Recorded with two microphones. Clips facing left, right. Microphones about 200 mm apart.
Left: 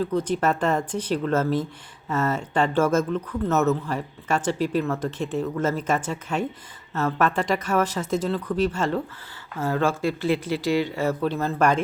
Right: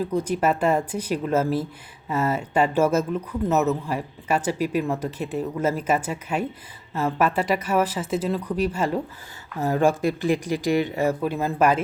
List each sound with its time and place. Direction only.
0.0 s speech: 10° right (ahead or behind)